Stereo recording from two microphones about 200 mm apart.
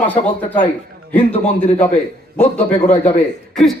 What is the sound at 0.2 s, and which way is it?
Speech, 40° left (ahead or behind).